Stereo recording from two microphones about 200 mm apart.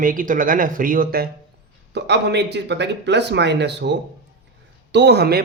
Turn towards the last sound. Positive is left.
turn(degrees=-50)  # may be behind; listen again after turning